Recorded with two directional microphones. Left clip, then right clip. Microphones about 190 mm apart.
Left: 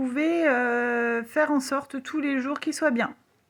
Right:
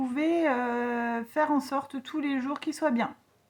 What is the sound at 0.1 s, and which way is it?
Speech, 15° left (ahead or behind).